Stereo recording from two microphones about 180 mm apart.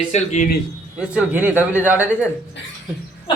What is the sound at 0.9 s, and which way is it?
A man's voice, 5° right (ahead or behind).